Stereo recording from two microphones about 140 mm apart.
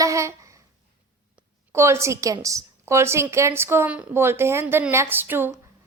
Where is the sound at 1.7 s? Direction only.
20° right (ahead or behind).